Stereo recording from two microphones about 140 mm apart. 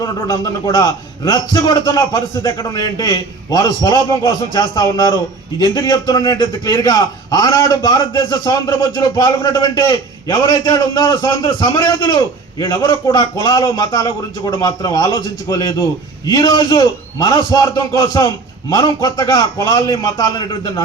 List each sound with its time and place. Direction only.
0.0 s a man's voice: 25° left (ahead or behind)